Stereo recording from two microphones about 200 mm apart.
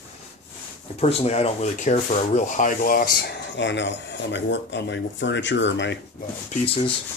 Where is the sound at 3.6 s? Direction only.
65° left (ahead or behind).